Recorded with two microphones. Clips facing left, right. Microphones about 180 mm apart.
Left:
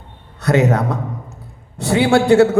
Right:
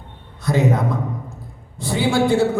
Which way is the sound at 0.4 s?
75° left (ahead or behind).